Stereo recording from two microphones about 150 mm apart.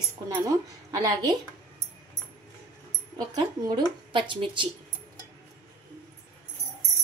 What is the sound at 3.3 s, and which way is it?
A woman's voice, 30° right (ahead or behind).